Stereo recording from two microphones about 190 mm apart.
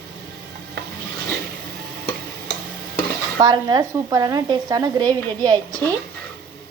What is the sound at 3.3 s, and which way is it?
Speech, 25° right (ahead or behind).